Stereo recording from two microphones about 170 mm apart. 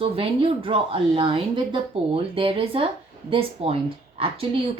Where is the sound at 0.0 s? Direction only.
35° right (ahead or behind).